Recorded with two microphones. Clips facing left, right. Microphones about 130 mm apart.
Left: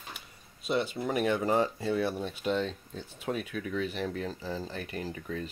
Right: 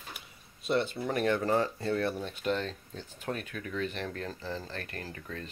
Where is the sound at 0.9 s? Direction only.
10° left (ahead or behind).